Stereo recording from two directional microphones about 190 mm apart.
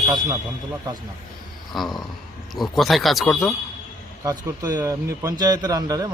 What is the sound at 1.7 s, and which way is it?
Speech, centre (ahead or behind).